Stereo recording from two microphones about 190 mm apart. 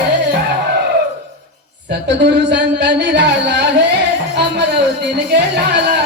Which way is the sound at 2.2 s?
65° right (ahead or behind).